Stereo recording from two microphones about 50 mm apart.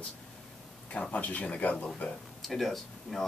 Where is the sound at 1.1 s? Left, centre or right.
Left.